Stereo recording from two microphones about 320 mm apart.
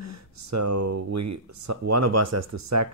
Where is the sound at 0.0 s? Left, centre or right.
Right.